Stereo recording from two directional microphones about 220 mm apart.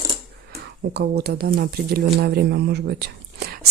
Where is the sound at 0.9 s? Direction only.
50° right (ahead or behind).